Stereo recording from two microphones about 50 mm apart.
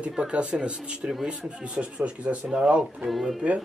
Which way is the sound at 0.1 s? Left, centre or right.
Centre.